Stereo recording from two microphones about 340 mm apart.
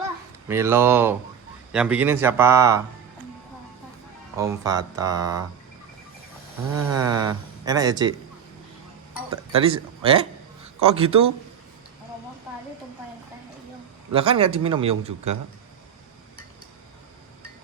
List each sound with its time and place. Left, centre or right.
0.4 s speech: centre
4.4 s speech: centre
6.7 s speech: centre
9.3 s speech: centre
14.1 s speech: centre